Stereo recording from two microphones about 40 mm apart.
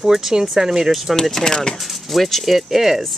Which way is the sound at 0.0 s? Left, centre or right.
Centre.